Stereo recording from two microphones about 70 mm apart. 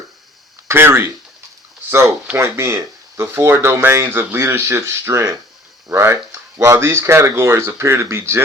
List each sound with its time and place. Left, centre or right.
0.7 s speech: right
2.3 s speech: right
4.4 s speech: right